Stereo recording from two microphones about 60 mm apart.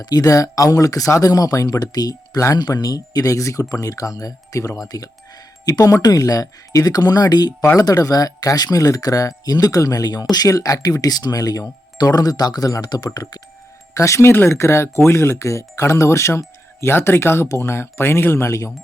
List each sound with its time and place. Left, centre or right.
0.1 s speech: left
2.4 s speech: left
13.9 s speech: left
14.2 s speech: left
16.8 s speech: left